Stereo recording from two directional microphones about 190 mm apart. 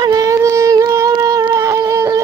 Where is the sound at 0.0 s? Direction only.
20° right (ahead or behind).